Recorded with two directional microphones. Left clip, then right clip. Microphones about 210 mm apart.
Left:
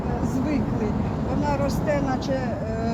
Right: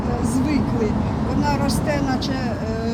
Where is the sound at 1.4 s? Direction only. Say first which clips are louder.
Right 2 dB; 10° left (ahead or behind).